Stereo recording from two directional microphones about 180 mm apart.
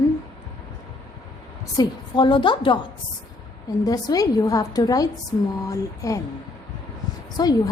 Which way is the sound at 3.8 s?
20° left (ahead or behind).